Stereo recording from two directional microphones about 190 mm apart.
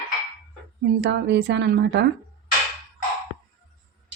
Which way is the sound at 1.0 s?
60° right (ahead or behind).